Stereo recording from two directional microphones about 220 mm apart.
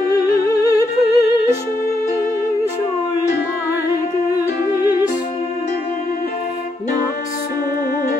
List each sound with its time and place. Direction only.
0.1 s music: 15° left (ahead or behind)